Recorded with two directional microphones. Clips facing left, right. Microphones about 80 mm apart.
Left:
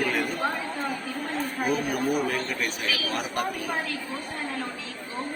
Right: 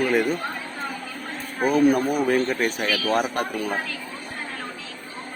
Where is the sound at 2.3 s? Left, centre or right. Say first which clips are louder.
Right 7 dB; right.